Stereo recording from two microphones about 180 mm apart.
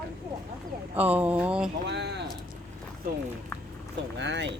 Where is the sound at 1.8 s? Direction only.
70° right (ahead or behind).